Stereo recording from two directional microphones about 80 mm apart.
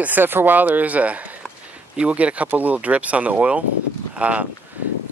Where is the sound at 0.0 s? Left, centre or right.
Right.